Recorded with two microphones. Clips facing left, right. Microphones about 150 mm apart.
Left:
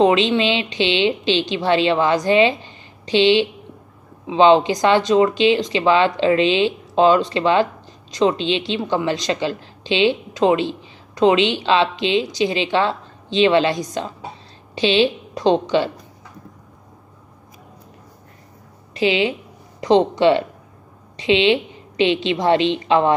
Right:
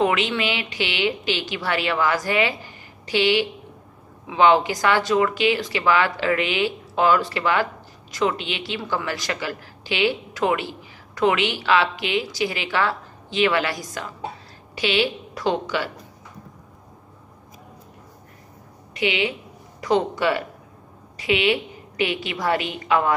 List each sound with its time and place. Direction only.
0.0 s a woman's voice: 25° left (ahead or behind)
18.9 s a woman's voice: 30° left (ahead or behind)